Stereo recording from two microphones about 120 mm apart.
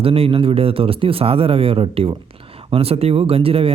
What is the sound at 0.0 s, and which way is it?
Speech, 50° right (ahead or behind).